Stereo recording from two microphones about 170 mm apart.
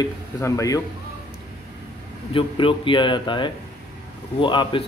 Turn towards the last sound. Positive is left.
turn(degrees=30)  # may be behind; listen again after turning